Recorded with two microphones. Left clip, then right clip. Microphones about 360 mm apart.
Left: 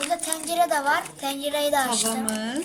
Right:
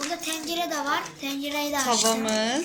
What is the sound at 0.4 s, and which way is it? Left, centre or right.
A child's voice, left.